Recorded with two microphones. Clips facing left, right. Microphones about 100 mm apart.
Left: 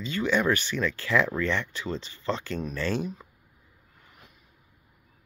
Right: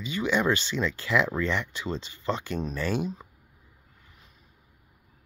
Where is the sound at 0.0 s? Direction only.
15° right (ahead or behind).